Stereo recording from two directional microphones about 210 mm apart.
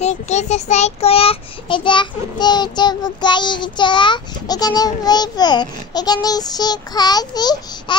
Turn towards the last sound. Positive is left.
turn(degrees=20)  # may be behind; listen again after turning